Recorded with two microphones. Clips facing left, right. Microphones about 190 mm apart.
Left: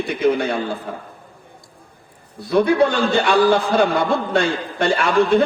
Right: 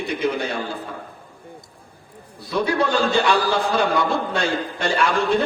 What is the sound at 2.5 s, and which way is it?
A man's voice, 55° left (ahead or behind).